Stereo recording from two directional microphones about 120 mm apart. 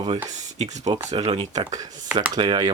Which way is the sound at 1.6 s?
30° right (ahead or behind).